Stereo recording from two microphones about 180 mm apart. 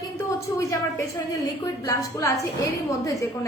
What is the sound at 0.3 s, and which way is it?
A woman's voice, 15° left (ahead or behind).